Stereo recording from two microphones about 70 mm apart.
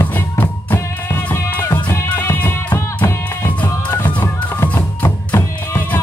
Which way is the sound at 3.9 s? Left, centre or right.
Left.